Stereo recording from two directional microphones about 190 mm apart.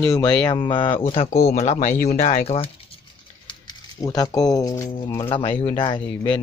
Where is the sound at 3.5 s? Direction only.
20° left (ahead or behind).